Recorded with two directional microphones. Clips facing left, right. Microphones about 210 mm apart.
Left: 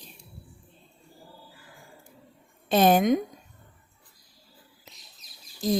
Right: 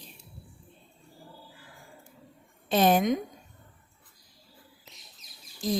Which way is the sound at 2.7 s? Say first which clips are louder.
Left 3 dB; 50° left (ahead or behind).